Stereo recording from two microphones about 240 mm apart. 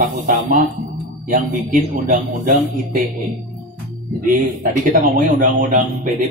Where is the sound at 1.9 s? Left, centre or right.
Right.